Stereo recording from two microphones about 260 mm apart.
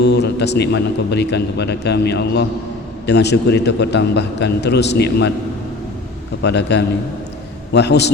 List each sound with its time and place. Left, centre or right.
0.0 s a man's voice: left
6.4 s a man's voice: left